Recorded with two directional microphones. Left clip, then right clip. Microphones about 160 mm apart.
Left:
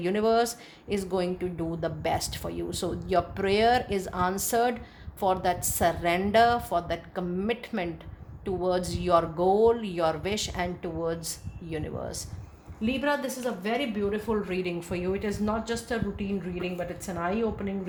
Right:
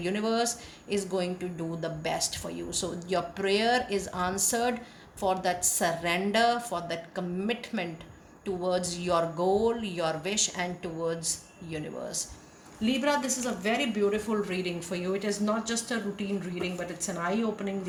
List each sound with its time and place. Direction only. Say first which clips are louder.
0.0 s a woman's voice: left 4 dB; 50° left (ahead or behind)